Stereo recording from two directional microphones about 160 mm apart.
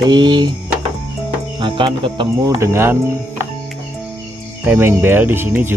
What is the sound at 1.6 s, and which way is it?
Speech, 30° right (ahead or behind).